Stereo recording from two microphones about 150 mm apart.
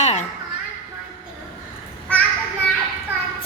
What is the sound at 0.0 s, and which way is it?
Children playing, 50° left (ahead or behind).